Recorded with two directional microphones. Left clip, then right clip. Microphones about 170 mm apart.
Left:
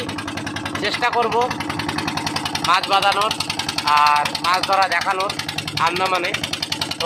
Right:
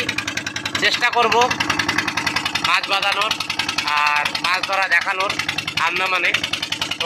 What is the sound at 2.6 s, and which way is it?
Speech, 30° left (ahead or behind).